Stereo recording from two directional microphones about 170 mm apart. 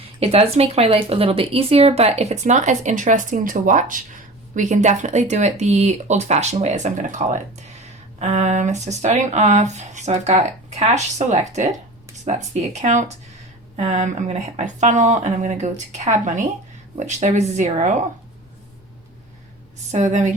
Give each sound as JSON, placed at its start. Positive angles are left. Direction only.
{"t": 0.0, "sound": "speech", "side_deg": -35}
{"t": 19.9, "sound": "speech", "side_deg": -45}